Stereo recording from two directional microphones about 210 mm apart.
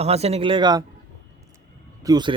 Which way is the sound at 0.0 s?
30° right (ahead or behind).